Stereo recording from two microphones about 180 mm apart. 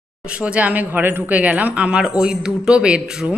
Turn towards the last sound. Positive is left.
turn(degrees=-5)  # may be behind; listen again after turning